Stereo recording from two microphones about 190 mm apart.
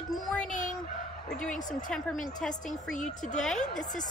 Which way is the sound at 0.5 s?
40° left (ahead or behind).